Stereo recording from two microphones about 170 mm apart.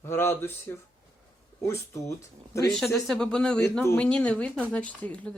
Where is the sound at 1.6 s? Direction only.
15° left (ahead or behind).